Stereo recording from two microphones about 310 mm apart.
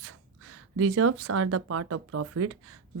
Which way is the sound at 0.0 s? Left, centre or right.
Right.